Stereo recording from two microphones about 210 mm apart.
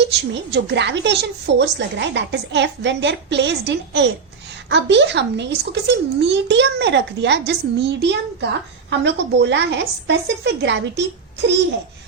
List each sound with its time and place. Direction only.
0.5 s a child's voice: 55° right (ahead or behind)